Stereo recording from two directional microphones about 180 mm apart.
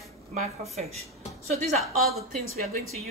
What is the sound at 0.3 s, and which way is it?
Speech, 35° right (ahead or behind).